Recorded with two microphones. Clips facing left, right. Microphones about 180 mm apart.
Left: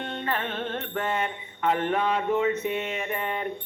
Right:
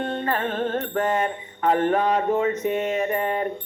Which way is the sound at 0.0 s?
40° right (ahead or behind).